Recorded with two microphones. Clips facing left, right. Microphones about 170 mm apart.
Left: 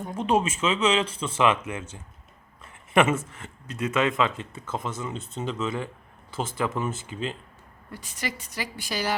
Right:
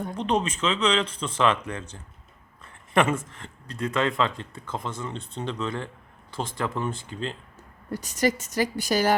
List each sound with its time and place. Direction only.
0.1 s speech: 5° left (ahead or behind)
7.9 s a woman's voice: 40° right (ahead or behind)